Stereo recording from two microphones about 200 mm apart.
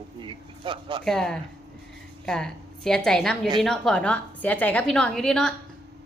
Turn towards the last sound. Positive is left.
turn(degrees=5)  # may be behind; listen again after turning